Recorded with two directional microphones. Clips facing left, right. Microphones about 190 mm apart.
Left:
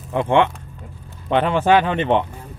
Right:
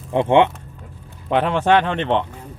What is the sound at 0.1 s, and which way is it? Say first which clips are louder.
Speech: right 2 dB; 20° right (ahead or behind).